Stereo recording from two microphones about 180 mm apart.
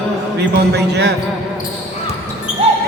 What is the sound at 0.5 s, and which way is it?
Speech, 65° right (ahead or behind).